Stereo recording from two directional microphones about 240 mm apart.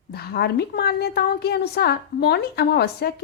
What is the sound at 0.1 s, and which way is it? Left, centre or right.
A woman's voice, left.